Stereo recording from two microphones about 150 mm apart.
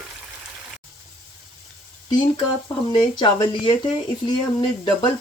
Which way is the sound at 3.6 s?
30° left (ahead or behind).